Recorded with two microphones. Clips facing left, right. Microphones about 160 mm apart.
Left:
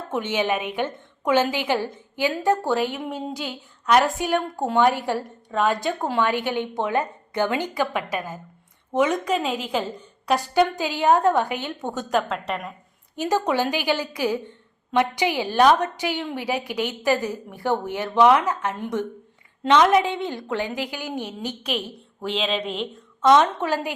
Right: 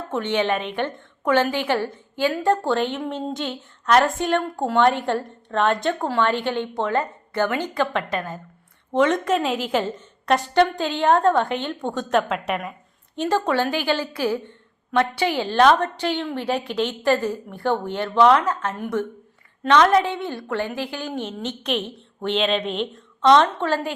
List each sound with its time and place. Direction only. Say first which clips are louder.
0.1 s a woman's voice: right 1 dB; 10° left (ahead or behind)
4.9 s a woman's voice: right 2 dB; 5° left (ahead or behind)
13.1 s a woman's voice: right 1 dB; 15° left (ahead or behind)